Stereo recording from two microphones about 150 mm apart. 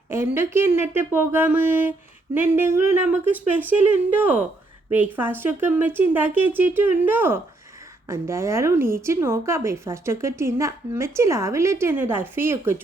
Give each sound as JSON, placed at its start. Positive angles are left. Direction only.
{"t": 0.1, "sound": "a woman's voice", "side_deg": -15}